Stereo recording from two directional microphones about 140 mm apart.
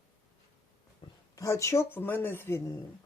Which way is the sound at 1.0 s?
35° left (ahead or behind).